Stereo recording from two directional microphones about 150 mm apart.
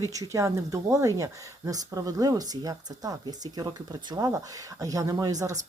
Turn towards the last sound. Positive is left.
turn(degrees=-20)  # may be behind; listen again after turning